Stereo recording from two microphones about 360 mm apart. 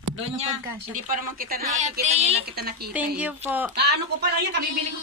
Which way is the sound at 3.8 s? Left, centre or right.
Right.